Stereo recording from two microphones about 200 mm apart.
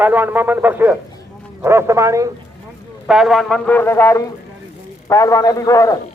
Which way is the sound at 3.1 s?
Centre (ahead or behind).